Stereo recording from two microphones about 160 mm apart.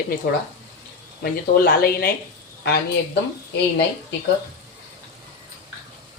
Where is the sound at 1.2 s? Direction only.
65° left (ahead or behind).